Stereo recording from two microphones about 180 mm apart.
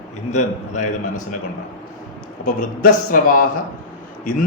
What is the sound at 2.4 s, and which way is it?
Speech, 50° left (ahead or behind).